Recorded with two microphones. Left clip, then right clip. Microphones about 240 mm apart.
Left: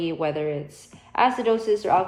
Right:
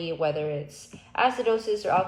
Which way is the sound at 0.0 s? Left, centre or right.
Left.